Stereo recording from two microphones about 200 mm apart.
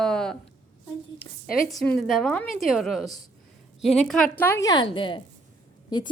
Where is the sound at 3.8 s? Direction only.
30° left (ahead or behind).